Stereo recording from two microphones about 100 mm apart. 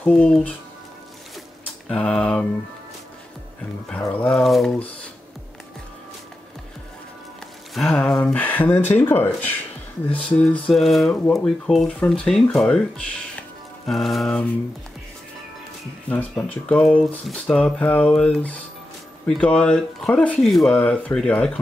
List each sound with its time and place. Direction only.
0.0 s speech: 10° left (ahead or behind)
1.9 s speech: 10° left (ahead or behind)
4.3 s speech: centre (ahead or behind)
7.7 s speech: 5° left (ahead or behind)
8.2 s speech: 15° left (ahead or behind)
10.8 s speech: centre (ahead or behind)
16.4 s speech: 10° left (ahead or behind)